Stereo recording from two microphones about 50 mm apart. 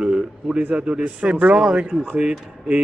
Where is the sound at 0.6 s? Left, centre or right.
Right.